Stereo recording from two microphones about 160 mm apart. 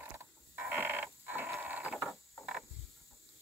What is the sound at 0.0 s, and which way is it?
Creak, 15° right (ahead or behind).